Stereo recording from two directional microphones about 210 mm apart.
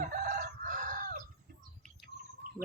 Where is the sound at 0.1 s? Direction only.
40° right (ahead or behind).